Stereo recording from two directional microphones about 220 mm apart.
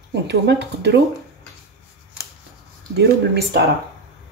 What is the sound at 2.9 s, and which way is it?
Speech, 50° right (ahead or behind).